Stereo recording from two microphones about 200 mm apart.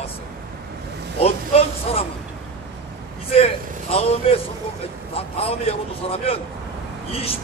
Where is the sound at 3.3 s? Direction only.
30° left (ahead or behind).